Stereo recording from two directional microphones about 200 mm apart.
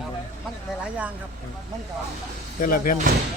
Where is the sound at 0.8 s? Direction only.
5° right (ahead or behind).